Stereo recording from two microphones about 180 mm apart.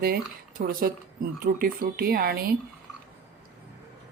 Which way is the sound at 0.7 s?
50° right (ahead or behind).